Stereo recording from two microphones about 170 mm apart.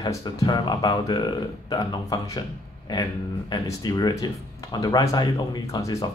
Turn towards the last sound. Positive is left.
turn(degrees=20)  # may be behind; listen again after turning